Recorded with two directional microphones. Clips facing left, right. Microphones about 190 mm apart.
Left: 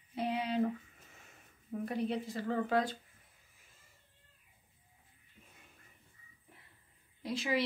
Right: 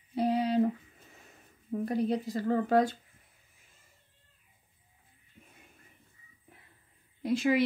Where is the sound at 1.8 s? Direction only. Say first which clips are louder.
Right 5 dB; 40° right (ahead or behind).